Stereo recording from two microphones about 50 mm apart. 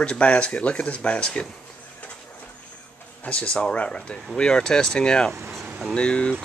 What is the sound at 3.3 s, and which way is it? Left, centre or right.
Speech, left.